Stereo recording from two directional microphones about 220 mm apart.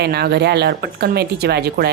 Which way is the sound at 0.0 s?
45° right (ahead or behind).